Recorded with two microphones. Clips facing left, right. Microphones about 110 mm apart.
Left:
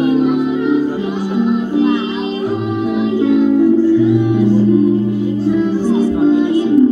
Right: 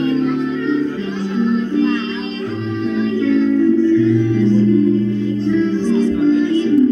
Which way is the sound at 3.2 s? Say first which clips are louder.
Left 3 dB; 15° left (ahead or behind).